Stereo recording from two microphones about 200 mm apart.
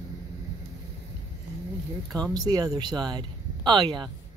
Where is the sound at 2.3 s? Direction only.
20° right (ahead or behind).